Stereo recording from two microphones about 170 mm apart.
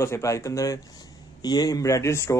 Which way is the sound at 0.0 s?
15° left (ahead or behind).